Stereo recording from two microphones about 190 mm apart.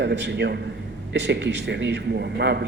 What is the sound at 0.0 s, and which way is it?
A man's voice, 65° right (ahead or behind).